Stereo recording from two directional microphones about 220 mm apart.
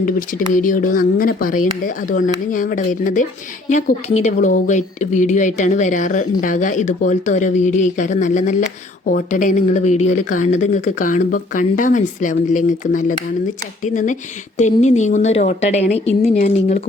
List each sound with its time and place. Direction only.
0.0 s speech: 35° left (ahead or behind)